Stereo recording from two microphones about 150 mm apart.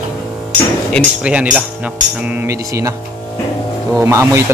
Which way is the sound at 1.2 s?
10° right (ahead or behind).